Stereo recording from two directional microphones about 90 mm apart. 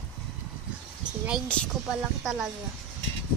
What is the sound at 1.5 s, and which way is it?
Speech, 15° left (ahead or behind).